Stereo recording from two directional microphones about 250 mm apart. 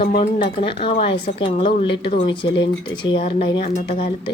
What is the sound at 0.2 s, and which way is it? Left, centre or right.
Speech, left.